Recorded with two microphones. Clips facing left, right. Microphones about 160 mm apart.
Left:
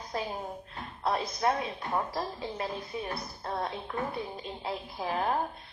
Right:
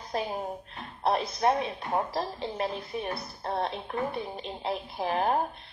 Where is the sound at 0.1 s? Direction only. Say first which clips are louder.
Right 4 dB; 25° right (ahead or behind).